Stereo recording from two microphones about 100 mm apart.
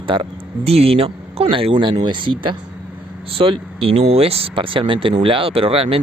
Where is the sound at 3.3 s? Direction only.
65° right (ahead or behind).